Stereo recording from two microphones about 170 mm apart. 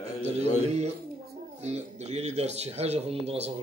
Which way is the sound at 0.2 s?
40° right (ahead or behind).